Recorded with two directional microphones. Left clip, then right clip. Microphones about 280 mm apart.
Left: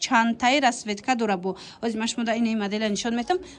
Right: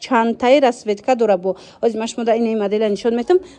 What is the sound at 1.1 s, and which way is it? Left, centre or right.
Speech, centre.